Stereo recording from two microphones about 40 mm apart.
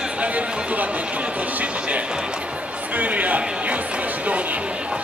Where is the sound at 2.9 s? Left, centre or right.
Right.